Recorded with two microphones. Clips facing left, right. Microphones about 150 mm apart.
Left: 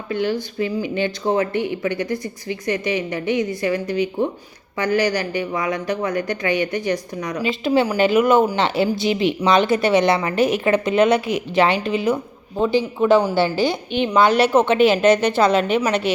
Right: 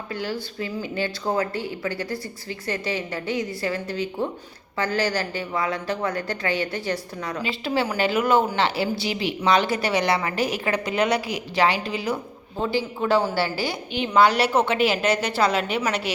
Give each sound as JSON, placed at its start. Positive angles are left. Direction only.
{"t": 0.1, "sound": "speech", "side_deg": 20}